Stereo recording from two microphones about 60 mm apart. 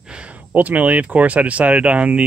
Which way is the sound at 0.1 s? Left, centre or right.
Centre.